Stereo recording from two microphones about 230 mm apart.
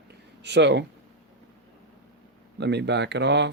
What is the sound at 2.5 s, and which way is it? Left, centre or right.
Speech, right.